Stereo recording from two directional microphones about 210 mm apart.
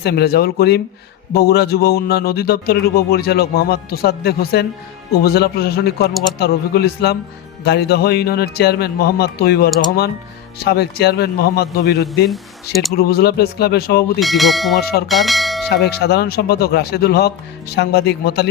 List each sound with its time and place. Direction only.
0.0 s a man's voice: 50° left (ahead or behind)
12.3 s speech: centre (ahead or behind)
13.0 s a man's voice: 50° left (ahead or behind)
14.2 s speech: centre (ahead or behind)
14.8 s a man's voice: 50° left (ahead or behind)
15.0 s bell: centre (ahead or behind)
15.7 s a man's voice: 50° left (ahead or behind)